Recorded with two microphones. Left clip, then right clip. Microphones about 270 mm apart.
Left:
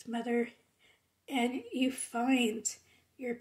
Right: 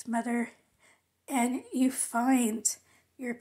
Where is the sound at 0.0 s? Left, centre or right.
Centre.